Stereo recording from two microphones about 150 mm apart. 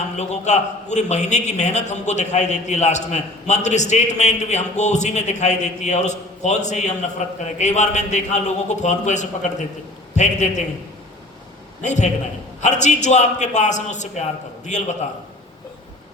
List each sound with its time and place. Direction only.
0.2 s a man's voice: 50° left (ahead or behind)
11.8 s a man's voice: 55° left (ahead or behind)